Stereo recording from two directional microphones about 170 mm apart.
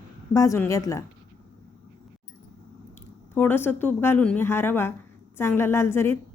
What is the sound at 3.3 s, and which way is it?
Speech, 10° left (ahead or behind).